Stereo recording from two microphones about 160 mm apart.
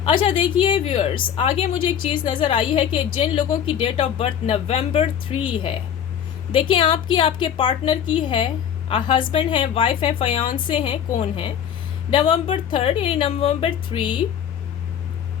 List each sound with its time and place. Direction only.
0.0 s a woman's voice: 30° left (ahead or behind)
6.5 s a woman's voice: 30° left (ahead or behind)